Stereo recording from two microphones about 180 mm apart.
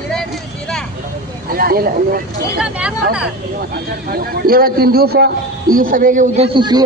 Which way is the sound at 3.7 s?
55° right (ahead or behind).